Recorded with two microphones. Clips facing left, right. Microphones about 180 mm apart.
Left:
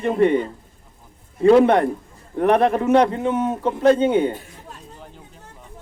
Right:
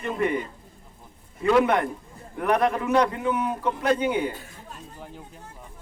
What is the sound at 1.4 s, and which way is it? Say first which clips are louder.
A man's voice: left 7 dB; 30° left (ahead or behind).